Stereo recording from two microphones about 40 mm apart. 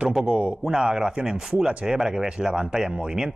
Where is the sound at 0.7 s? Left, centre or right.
Centre.